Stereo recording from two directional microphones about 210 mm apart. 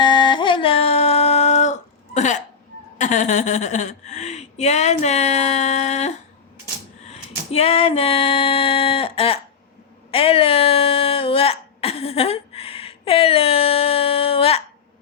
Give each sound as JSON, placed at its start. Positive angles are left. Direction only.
{"t": 0.0, "sound": "music", "side_deg": 20}
{"t": 3.0, "sound": "speech", "side_deg": 35}
{"t": 7.1, "sound": "female singing", "side_deg": 30}
{"t": 10.1, "sound": "hiccup", "side_deg": 25}